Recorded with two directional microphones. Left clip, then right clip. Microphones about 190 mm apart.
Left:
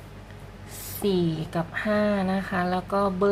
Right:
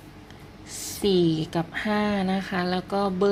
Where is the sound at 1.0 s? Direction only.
25° right (ahead or behind).